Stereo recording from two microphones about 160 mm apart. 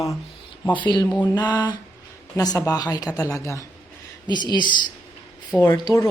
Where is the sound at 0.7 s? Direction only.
30° left (ahead or behind).